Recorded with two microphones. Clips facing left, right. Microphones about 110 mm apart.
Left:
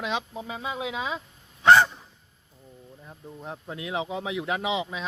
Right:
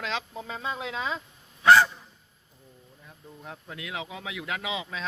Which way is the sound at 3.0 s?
25° left (ahead or behind).